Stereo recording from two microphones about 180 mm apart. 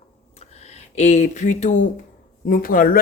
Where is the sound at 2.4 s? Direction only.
50° left (ahead or behind).